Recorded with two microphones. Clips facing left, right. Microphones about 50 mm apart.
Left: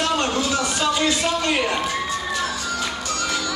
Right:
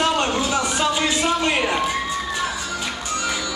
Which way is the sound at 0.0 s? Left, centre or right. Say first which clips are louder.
Right 1 dB; centre.